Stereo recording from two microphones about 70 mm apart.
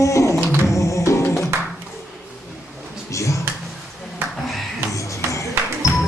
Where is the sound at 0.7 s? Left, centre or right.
Left.